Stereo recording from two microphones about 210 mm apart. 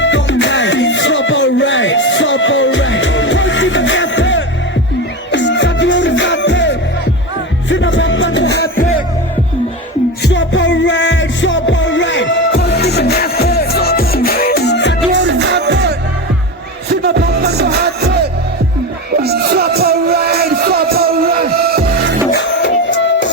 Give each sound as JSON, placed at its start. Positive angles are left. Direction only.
{"t": 0.0, "sound": "music", "side_deg": 60}
{"t": 10.2, "sound": "music", "side_deg": 60}
{"t": 15.1, "sound": "music", "side_deg": -55}
{"t": 22.3, "sound": "music", "side_deg": 55}